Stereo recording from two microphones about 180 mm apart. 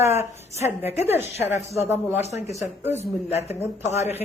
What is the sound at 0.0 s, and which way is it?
A woman's voice, 15° right (ahead or behind).